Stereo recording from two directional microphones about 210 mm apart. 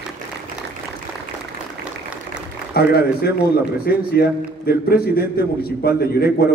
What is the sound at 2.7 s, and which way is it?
A man's voice, 50° left (ahead or behind).